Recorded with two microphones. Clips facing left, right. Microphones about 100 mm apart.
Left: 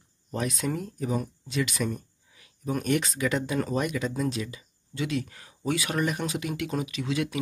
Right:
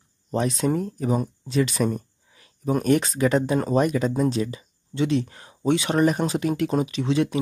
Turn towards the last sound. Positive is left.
turn(degrees=-30)  # may be behind; listen again after turning